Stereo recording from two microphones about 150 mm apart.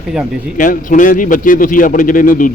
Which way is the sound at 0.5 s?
65° left (ahead or behind).